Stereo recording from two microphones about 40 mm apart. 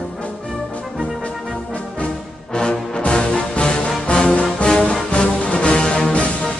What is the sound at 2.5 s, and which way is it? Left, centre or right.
Music, left.